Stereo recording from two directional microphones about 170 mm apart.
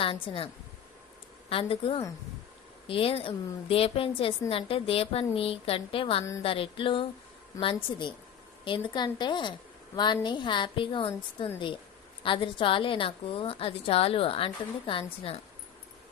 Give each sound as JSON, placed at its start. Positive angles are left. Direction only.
{"t": 0.0, "sound": "a woman's voice", "side_deg": 30}